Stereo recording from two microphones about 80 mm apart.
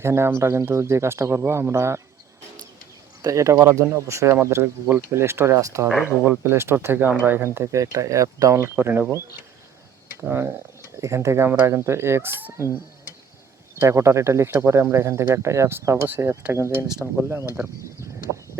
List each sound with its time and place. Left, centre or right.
0.0 s speech: right
3.2 s speech: right
10.2 s speech: right
13.7 s speech: right
16.0 s speech: right
16.5 s speech: right